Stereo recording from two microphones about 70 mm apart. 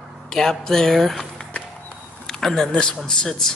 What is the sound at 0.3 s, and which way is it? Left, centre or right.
Speech, centre.